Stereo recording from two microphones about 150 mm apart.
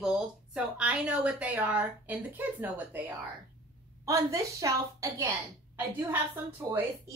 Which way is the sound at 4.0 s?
20° right (ahead or behind).